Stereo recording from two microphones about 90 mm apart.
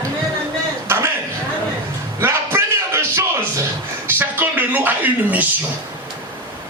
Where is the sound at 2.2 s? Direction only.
30° right (ahead or behind).